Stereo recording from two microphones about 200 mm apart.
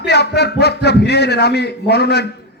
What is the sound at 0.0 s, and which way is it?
Speech, 55° left (ahead or behind).